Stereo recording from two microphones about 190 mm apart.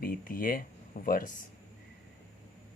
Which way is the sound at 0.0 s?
45° left (ahead or behind).